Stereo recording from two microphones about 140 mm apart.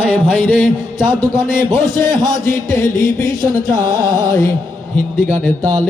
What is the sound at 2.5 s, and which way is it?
Music, 70° left (ahead or behind).